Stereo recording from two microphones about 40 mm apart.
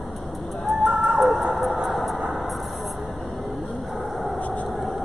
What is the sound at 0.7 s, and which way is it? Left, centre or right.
Chicken, centre.